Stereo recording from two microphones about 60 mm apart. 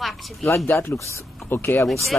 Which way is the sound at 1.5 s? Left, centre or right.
Left.